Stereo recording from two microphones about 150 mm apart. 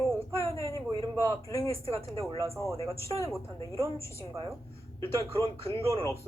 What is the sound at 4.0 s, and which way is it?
Speech, 20° left (ahead or behind).